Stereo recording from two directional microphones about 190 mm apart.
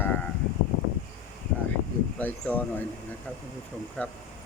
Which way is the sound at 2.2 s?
10° left (ahead or behind).